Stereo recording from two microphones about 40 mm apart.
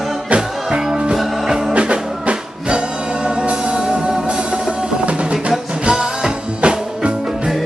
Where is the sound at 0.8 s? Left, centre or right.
Centre.